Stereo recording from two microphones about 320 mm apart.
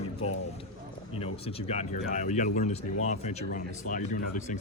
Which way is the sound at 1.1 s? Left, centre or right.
Centre.